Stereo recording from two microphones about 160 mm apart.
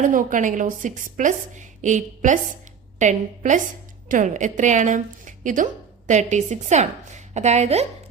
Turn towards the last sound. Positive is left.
turn(degrees=-45)  # may be behind; listen again after turning